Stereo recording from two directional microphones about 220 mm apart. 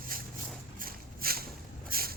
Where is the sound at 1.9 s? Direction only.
40° right (ahead or behind).